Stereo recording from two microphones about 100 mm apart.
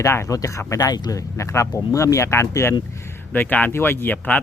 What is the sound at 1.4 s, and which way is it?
Speech, 30° left (ahead or behind).